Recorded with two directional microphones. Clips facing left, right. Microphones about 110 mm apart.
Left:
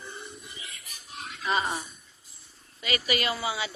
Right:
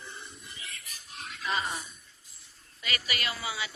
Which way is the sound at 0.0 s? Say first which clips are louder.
Left 4 dB; 10° left (ahead or behind).